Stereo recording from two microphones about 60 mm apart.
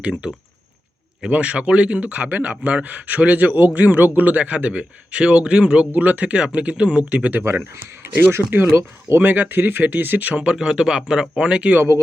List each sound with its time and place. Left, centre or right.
0.0 s a man's voice: centre
8.4 s a man's voice: centre
8.7 s speech: right
9.2 s speech: right
10.4 s a man's voice: centre